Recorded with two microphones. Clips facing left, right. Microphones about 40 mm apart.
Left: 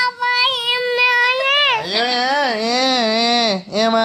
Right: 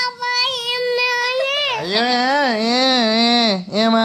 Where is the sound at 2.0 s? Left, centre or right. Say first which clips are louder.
Right 2 dB; left.